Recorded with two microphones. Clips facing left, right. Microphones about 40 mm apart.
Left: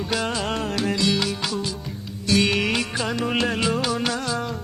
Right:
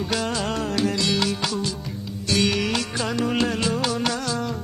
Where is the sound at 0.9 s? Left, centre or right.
Centre.